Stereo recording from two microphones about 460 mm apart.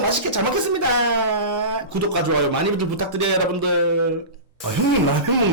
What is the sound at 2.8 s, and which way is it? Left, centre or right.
Speech, right.